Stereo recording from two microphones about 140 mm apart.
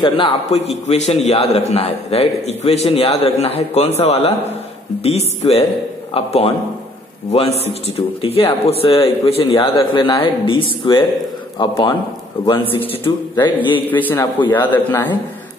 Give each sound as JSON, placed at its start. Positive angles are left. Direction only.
{"t": 0.0, "sound": "a man's voice", "side_deg": 40}
{"t": 0.8, "sound": "a man's voice", "side_deg": 50}
{"t": 13.8, "sound": "a man's voice", "side_deg": 15}